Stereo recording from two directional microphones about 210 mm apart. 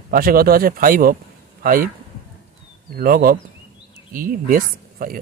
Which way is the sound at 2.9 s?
45° right (ahead or behind).